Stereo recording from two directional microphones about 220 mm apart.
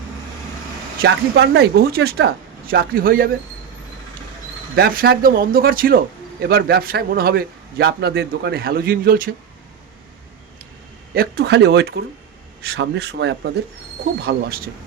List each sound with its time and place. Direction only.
1.0 s a man's voice: 50° right (ahead or behind)
4.7 s a man's voice: 45° right (ahead or behind)
11.1 s a man's voice: 45° right (ahead or behind)